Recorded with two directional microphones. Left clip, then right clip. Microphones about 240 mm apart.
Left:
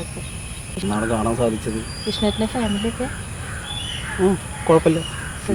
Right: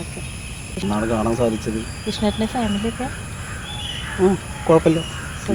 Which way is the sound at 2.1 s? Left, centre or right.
Centre.